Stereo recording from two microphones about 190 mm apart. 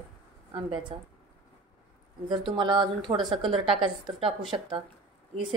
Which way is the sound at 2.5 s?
25° right (ahead or behind).